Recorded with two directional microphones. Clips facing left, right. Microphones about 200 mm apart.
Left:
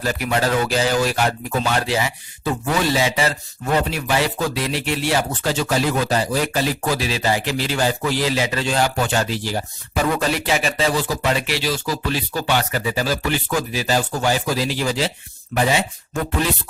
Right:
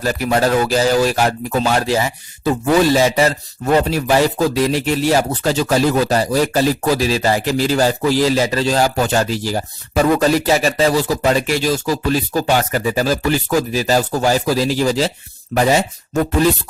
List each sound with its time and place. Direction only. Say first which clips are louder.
0.0 s speech: right 4 dB; 40° right (ahead or behind)